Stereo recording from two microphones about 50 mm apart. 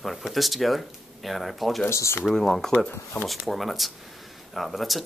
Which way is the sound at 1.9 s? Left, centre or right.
Left.